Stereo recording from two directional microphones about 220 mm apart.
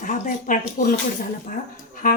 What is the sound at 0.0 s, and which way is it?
Speech, 35° left (ahead or behind).